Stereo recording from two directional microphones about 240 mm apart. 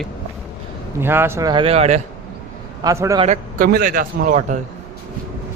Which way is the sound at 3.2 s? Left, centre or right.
Right.